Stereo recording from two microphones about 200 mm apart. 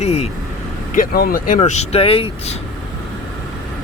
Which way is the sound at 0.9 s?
45° left (ahead or behind).